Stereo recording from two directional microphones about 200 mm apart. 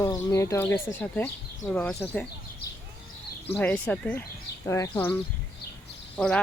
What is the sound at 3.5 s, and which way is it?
Speech, 5° left (ahead or behind).